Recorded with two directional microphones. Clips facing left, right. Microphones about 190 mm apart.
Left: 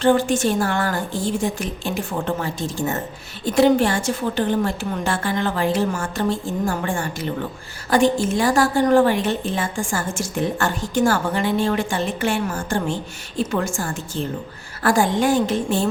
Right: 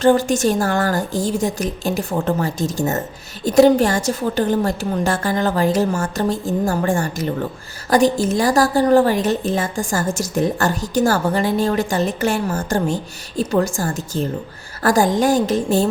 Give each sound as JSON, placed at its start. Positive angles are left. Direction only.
{"t": 0.0, "sound": "a woman's voice", "side_deg": -40}